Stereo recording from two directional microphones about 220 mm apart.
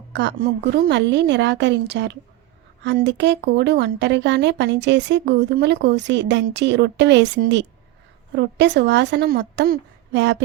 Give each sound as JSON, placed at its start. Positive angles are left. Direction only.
{"t": 0.1, "sound": "speech", "side_deg": -50}